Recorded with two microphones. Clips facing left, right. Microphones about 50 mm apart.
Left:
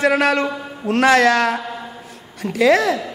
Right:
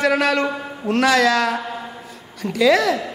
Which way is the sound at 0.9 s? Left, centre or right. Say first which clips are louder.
Left 2 dB; left.